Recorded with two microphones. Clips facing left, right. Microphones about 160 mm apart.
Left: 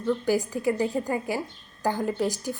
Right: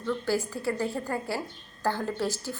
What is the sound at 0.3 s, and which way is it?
A woman's voice, 15° left (ahead or behind).